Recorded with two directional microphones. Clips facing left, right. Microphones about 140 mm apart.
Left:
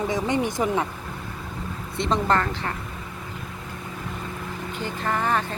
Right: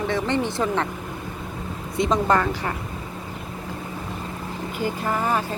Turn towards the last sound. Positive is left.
turn(degrees=-10)  # may be behind; listen again after turning